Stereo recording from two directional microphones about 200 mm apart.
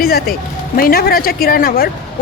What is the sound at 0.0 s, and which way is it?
A woman's voice, 50° left (ahead or behind).